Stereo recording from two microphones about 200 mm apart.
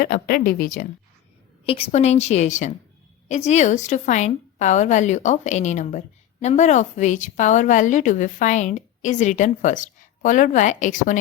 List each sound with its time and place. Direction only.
0.0 s speech: 50° left (ahead or behind)
1.6 s a woman's voice: 30° left (ahead or behind)